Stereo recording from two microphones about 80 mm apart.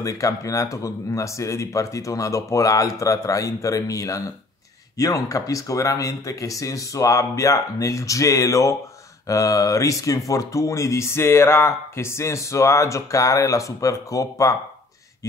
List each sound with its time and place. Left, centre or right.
0.0 s speech: left